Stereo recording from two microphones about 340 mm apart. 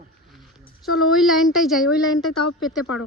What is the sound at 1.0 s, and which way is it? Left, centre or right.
A woman's voice, centre.